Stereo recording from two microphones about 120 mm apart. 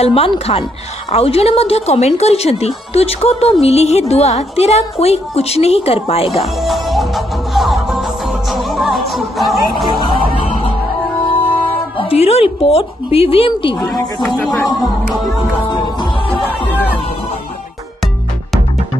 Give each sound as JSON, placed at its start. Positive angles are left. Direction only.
{"t": 0.0, "sound": "a woman's voice", "side_deg": 55}
{"t": 6.4, "sound": "music", "side_deg": 0}
{"t": 12.0, "sound": "speech", "side_deg": 55}
{"t": 14.2, "sound": "speech", "side_deg": 5}
{"t": 16.4, "sound": "music", "side_deg": 15}